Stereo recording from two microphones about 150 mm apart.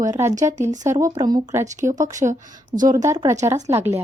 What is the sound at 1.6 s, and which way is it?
Speech, 55° right (ahead or behind).